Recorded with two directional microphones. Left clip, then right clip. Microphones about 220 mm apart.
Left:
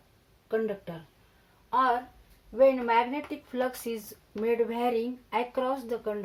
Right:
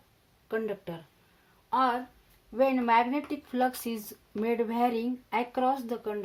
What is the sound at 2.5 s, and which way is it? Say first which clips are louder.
Speech: left 2 dB; 50° right (ahead or behind).